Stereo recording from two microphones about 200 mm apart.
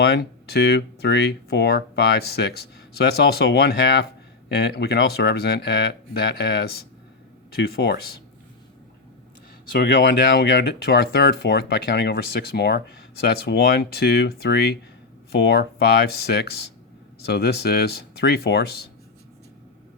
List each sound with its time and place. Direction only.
0.0 s speech: 55° left (ahead or behind)
9.7 s speech: 50° left (ahead or behind)